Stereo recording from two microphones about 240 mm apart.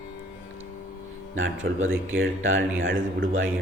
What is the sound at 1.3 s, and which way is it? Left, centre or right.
Speech, right.